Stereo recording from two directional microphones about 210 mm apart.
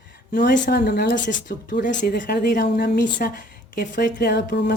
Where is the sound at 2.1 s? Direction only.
45° left (ahead or behind).